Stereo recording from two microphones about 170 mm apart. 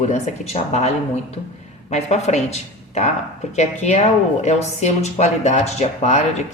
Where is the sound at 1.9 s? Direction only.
40° left (ahead or behind).